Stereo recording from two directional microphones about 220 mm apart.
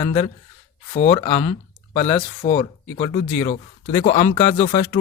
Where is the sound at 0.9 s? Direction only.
30° left (ahead or behind).